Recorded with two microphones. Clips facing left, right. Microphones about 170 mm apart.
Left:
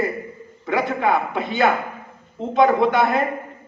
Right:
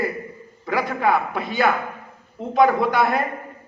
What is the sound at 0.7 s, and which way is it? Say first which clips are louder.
Speech: left 1 dB; 25° left (ahead or behind).